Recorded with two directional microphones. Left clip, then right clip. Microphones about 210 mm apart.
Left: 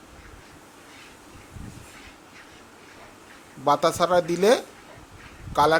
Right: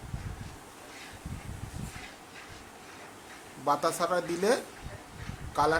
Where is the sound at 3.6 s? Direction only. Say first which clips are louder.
Left 7 dB; 30° left (ahead or behind).